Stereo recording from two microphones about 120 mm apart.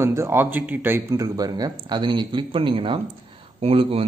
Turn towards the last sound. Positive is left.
turn(degrees=-50)  # may be behind; listen again after turning